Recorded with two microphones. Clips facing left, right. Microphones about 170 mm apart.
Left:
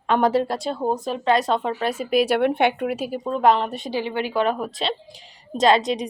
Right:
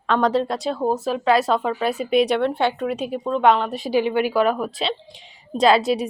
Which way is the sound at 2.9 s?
5° left (ahead or behind).